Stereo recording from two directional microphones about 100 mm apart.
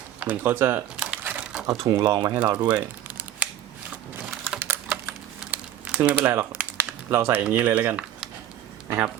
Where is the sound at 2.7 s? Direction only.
15° right (ahead or behind).